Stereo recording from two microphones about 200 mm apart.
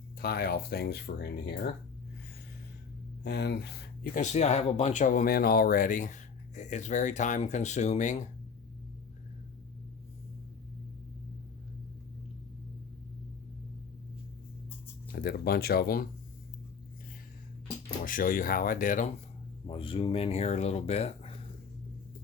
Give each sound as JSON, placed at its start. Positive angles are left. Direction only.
{"t": 0.2, "sound": "speech", "side_deg": 50}
{"t": 3.2, "sound": "speech", "side_deg": 55}
{"t": 4.2, "sound": "speech", "side_deg": 35}
{"t": 15.1, "sound": "speech", "side_deg": 50}
{"t": 18.0, "sound": "speech", "side_deg": 45}
{"t": 19.6, "sound": "speech", "side_deg": 25}